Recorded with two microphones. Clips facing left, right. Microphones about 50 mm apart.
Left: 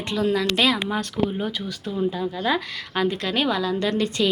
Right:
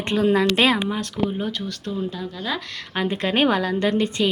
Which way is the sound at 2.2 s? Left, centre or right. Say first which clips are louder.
Left 4 dB; centre.